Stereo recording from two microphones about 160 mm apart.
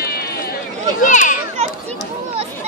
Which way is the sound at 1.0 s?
50° left (ahead or behind).